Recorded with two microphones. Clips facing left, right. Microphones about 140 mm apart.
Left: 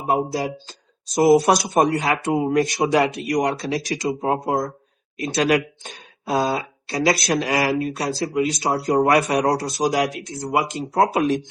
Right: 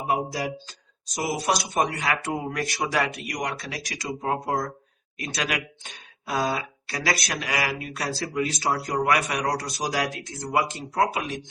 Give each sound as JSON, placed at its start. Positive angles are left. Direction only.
{"t": 0.1, "sound": "speech", "side_deg": 30}
{"t": 1.1, "sound": "speech", "side_deg": 45}
{"t": 5.4, "sound": "speech", "side_deg": 40}
{"t": 6.3, "sound": "speech", "side_deg": 25}
{"t": 8.9, "sound": "speech", "side_deg": 35}
{"t": 10.9, "sound": "speech", "side_deg": 35}